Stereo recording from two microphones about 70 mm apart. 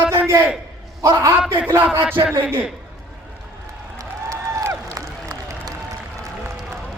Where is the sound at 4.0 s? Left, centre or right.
Right.